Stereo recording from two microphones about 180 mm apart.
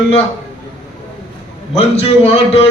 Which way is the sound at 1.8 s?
35° left (ahead or behind).